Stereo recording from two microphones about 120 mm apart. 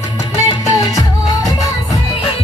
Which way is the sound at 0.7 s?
30° left (ahead or behind).